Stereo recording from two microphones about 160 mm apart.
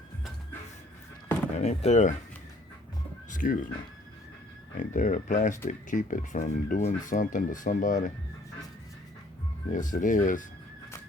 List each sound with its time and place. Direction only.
1.5 s speech: 45° left (ahead or behind)
3.2 s music: 55° left (ahead or behind)
4.8 s speech: 50° left (ahead or behind)
9.7 s speech: 55° left (ahead or behind)